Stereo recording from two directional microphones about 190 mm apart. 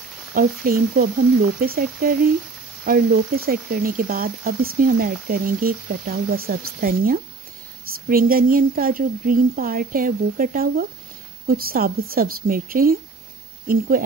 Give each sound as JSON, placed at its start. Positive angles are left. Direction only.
{"t": 0.3, "sound": "speech", "side_deg": -50}